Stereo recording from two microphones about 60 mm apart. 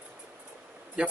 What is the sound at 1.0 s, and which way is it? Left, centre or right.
Speech, centre.